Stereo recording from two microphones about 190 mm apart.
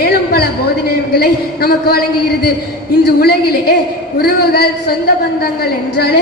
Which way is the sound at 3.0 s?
55° left (ahead or behind).